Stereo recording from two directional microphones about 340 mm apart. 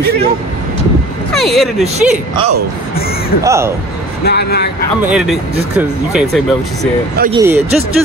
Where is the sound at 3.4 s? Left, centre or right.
Centre.